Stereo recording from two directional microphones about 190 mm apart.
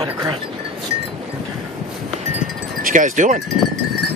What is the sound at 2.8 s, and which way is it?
Speech, 45° right (ahead or behind).